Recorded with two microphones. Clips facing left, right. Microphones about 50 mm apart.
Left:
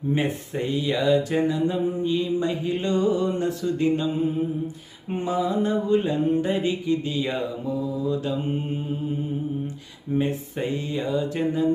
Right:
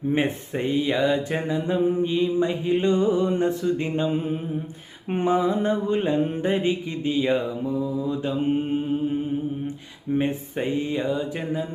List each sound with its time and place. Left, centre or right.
0.1 s mantra: right
10.2 s mantra: right